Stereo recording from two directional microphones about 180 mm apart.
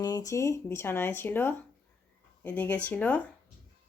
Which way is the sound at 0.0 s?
20° left (ahead or behind).